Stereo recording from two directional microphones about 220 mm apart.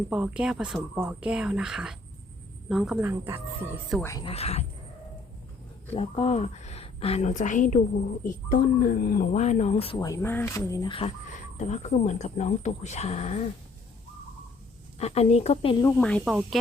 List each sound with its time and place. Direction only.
0.1 s speech: 5° right (ahead or behind)
4.0 s speech: 15° left (ahead or behind)
4.3 s a woman's voice: 30° left (ahead or behind)
5.9 s a woman's voice: 30° left (ahead or behind)
14.9 s a woman's voice: 30° left (ahead or behind)
15.8 s speech: 10° left (ahead or behind)